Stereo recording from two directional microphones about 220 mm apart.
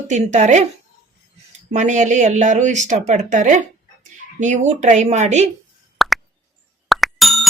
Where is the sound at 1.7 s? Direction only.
35° right (ahead or behind).